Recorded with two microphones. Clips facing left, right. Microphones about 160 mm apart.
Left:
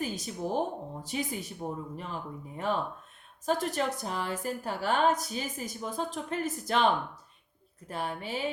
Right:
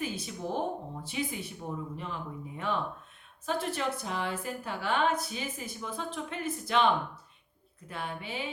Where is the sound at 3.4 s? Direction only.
40° left (ahead or behind).